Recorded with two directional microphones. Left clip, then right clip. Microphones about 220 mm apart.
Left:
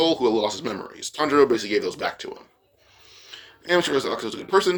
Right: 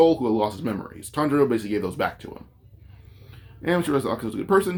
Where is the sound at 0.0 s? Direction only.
45° left (ahead or behind).